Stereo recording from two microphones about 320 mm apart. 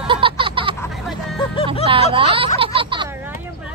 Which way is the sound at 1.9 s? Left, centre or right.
Centre.